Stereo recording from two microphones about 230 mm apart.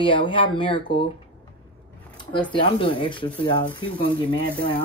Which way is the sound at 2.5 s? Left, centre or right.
Left.